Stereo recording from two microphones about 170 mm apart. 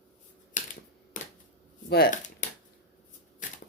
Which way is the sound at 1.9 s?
55° left (ahead or behind).